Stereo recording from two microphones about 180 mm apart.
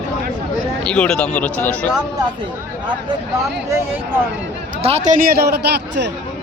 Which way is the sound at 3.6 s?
15° right (ahead or behind).